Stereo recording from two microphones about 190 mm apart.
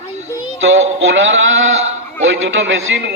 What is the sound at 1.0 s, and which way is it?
A man's voice, 80° right.